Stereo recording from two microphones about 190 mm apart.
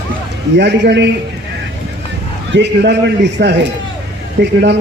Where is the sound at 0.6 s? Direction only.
65° right (ahead or behind).